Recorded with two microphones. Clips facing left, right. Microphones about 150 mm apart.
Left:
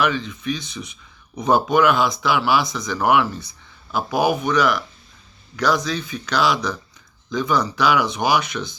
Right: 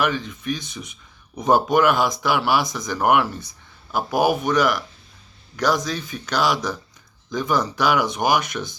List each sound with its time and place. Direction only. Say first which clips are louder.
0.0 s speech: left 1 dB; 45° right (ahead or behind)